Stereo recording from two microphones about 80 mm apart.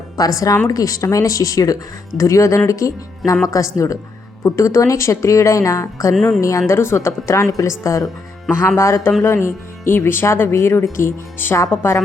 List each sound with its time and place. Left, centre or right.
0.2 s speech: left